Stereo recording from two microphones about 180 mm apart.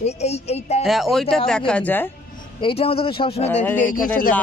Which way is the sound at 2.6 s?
30° left (ahead or behind).